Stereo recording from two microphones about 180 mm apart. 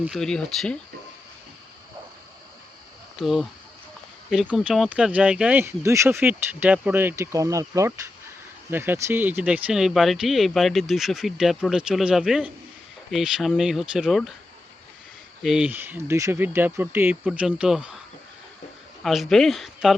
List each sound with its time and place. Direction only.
0.0 s speech: centre (ahead or behind)
3.2 s speech: centre (ahead or behind)
15.4 s speech: 5° right (ahead or behind)
19.0 s speech: centre (ahead or behind)